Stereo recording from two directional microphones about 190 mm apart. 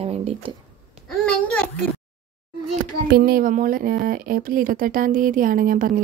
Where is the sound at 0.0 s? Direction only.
30° right (ahead or behind).